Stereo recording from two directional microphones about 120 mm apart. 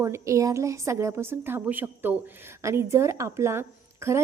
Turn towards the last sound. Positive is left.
turn(degrees=-20)  # may be behind; listen again after turning